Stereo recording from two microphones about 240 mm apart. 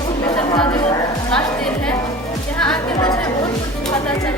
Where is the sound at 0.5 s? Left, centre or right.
Centre.